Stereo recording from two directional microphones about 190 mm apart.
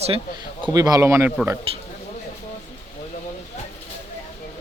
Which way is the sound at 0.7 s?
20° right (ahead or behind).